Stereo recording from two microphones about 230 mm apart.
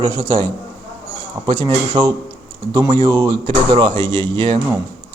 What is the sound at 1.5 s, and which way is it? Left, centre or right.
Speech, centre.